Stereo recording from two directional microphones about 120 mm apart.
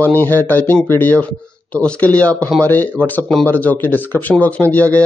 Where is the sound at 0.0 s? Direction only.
15° left (ahead or behind).